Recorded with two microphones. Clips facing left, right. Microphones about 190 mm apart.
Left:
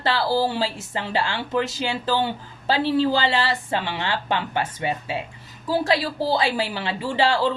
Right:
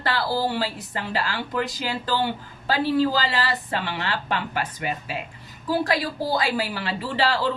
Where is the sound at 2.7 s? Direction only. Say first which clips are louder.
Left 1 dB; 25° left (ahead or behind).